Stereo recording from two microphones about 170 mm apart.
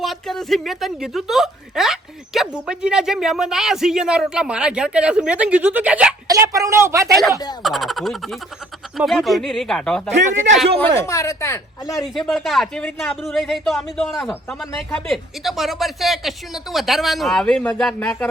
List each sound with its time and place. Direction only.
0.0 s speech: centre (ahead or behind)
6.2 s a woman's voice: 20° right (ahead or behind)
7.6 s speech: centre (ahead or behind)
11.0 s speech: 20° left (ahead or behind)
12.0 s speech: centre (ahead or behind)